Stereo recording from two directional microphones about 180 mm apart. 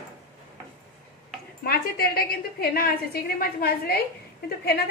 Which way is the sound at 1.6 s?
60° left (ahead or behind).